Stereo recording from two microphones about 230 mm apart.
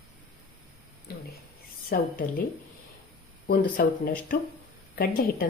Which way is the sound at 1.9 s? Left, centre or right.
Left.